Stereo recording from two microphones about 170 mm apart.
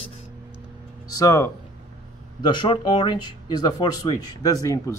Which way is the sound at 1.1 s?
20° left (ahead or behind).